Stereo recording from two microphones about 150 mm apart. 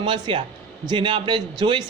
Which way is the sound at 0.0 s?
30° right (ahead or behind).